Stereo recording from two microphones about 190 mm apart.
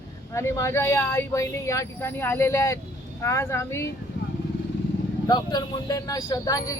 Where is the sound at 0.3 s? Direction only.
15° left (ahead or behind).